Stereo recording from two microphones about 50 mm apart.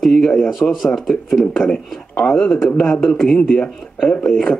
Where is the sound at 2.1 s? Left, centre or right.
Centre.